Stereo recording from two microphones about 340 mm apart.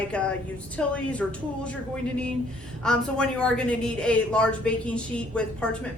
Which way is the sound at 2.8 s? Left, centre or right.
Centre.